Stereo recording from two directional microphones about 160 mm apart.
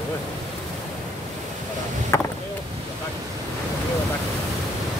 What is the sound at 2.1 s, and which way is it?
Speech, 15° left (ahead or behind).